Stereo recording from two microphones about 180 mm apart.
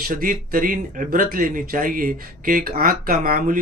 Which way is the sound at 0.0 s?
50° right (ahead or behind).